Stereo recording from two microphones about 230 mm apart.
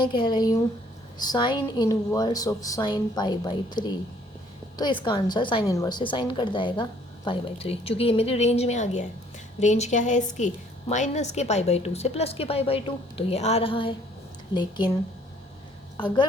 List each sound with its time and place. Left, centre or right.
0.0 s a woman's voice: left
16.0 s a woman's voice: centre